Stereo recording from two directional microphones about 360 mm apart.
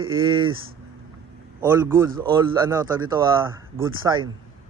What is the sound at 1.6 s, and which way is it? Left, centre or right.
Speech, centre.